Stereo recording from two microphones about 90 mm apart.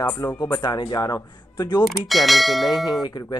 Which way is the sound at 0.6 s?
65° left (ahead or behind).